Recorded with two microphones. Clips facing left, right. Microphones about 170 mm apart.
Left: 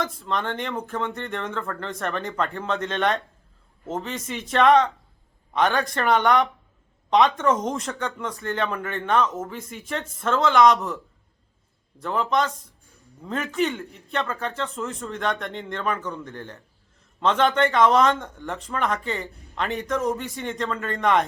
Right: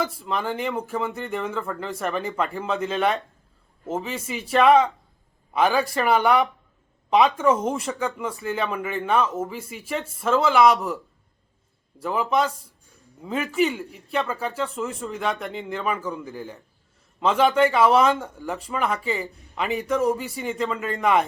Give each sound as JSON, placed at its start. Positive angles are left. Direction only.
{"t": 0.0, "sound": "speech", "side_deg": -5}